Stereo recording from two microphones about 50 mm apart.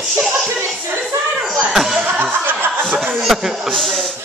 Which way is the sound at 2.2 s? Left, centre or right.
Right.